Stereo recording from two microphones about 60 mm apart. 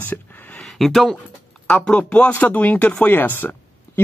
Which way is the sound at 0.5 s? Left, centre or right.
Centre.